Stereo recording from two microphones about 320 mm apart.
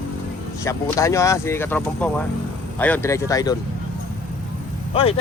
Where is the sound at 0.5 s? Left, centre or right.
Centre.